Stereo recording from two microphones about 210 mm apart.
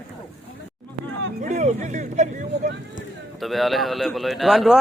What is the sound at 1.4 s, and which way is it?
Speech, 35° right (ahead or behind).